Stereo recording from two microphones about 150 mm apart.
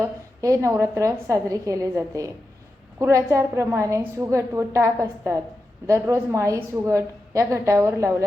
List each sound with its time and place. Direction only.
0.0 s a woman's voice: 20° right (ahead or behind)